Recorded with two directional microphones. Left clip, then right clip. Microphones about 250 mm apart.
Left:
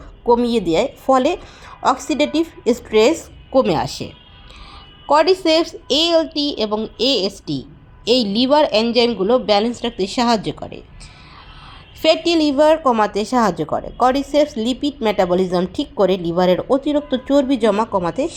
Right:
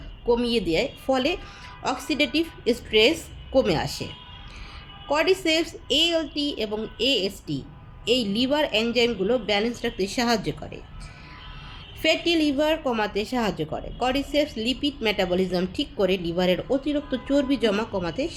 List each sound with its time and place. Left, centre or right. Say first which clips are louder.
0.3 s a woman's voice: left 7 dB; centre
12.0 s a woman's voice: left 7 dB; centre